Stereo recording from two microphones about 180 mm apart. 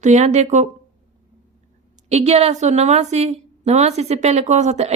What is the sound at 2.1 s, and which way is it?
A woman's voice, 35° right (ahead or behind).